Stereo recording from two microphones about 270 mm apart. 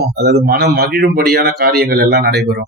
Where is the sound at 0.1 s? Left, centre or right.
Right.